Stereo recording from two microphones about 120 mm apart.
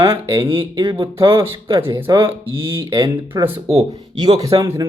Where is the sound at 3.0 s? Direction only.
25° right (ahead or behind).